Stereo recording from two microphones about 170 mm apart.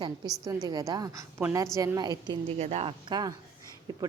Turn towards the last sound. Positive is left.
turn(degrees=-25)  # may be behind; listen again after turning